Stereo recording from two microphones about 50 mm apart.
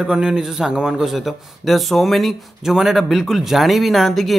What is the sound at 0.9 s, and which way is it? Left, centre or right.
A man's voice, centre.